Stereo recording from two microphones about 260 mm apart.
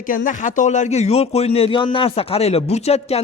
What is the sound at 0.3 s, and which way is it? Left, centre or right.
A man's voice, left.